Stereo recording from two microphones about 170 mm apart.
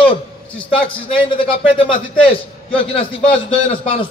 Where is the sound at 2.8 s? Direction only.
30° left (ahead or behind).